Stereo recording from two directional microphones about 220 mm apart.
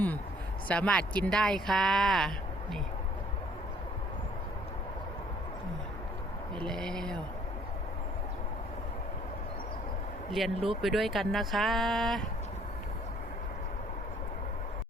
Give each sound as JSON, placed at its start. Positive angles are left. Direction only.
{"t": 0.7, "sound": "speech", "side_deg": 5}
{"t": 6.6, "sound": "speech", "side_deg": 5}
{"t": 10.3, "sound": "speech", "side_deg": 0}